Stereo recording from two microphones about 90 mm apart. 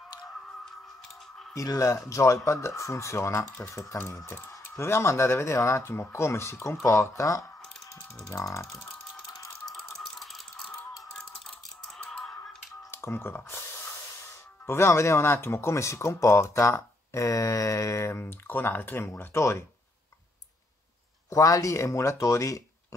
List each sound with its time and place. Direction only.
1.5 s speech: 40° left (ahead or behind)
9.7 s rattle: 5° left (ahead or behind)
11.1 s a sound: 5° left (ahead or behind)
12.0 s typing: 10° left (ahead or behind)
12.9 s spray: 25° left (ahead or behind)
14.7 s speech: 30° left (ahead or behind)
21.3 s speech: 40° left (ahead or behind)